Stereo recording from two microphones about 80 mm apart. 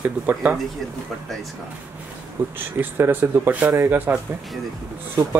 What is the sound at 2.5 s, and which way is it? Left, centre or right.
Speech, right.